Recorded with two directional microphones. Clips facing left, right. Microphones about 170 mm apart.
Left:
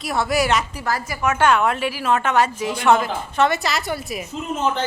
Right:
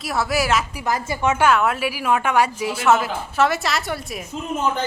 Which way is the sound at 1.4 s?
5° right (ahead or behind).